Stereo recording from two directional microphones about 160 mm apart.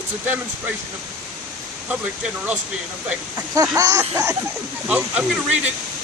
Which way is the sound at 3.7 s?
20° right (ahead or behind).